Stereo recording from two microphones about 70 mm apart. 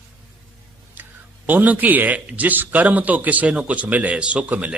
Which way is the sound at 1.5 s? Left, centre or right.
Right.